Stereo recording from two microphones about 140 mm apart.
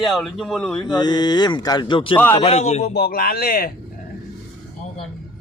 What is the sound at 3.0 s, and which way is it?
Speech, 90° left.